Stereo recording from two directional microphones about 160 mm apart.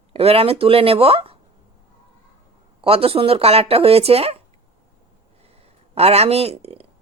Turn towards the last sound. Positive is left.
turn(degrees=-40)  # may be behind; listen again after turning